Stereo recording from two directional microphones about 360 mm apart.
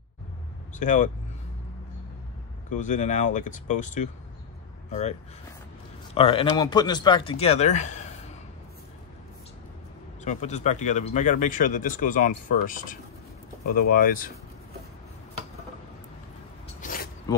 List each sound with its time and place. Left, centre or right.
0.7 s speech: left
2.7 s speech: centre
6.1 s speech: centre
10.2 s speech: centre
16.8 s a sound: left